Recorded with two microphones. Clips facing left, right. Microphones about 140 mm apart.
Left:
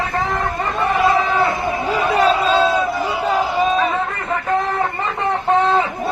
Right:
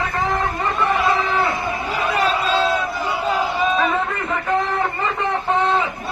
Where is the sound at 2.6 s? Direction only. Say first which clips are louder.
Left 3 dB; 25° left (ahead or behind).